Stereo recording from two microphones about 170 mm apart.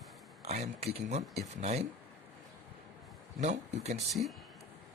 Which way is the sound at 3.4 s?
40° right (ahead or behind).